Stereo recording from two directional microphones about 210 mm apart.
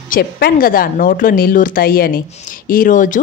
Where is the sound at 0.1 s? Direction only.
45° left (ahead or behind).